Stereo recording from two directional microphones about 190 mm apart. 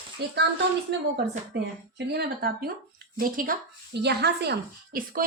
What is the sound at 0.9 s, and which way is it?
Speech, 60° right (ahead or behind).